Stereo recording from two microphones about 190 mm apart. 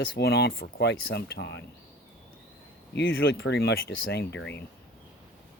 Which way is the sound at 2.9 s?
60° left (ahead or behind).